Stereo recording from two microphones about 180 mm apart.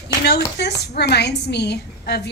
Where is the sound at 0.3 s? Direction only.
65° left (ahead or behind).